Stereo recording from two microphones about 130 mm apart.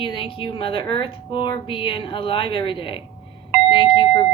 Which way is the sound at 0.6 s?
40° left (ahead or behind).